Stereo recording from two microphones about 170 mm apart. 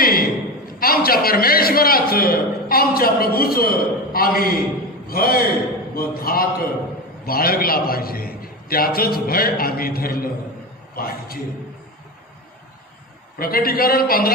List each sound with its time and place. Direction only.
0.0 s a sound: 60° left (ahead or behind)
0.8 s a man's voice: 60° left (ahead or behind)
13.4 s a man's voice: 60° left (ahead or behind)